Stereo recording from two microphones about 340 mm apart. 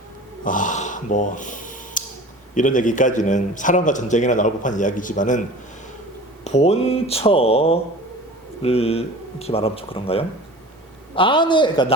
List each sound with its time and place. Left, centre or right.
0.4 s a sound: left
2.6 s a man's voice: left
6.4 s speech: centre